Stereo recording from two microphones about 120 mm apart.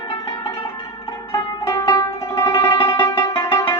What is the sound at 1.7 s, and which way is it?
Music, 30° left (ahead or behind).